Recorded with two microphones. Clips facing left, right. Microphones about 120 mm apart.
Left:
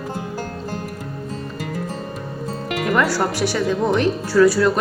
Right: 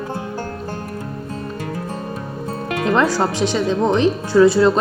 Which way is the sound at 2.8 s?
25° right (ahead or behind).